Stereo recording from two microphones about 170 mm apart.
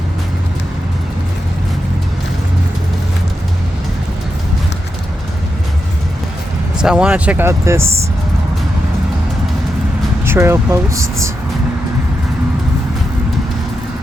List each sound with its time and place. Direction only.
6.7 s speech: 5° right (ahead or behind)
10.2 s speech: 15° right (ahead or behind)